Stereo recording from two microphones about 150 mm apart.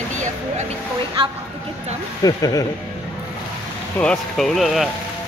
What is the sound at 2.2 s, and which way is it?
Speech, 25° left (ahead or behind).